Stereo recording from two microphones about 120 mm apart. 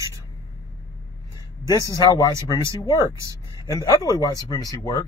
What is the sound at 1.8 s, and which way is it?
Speech, 30° left (ahead or behind).